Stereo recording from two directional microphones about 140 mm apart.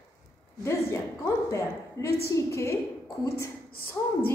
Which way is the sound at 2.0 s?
90° left.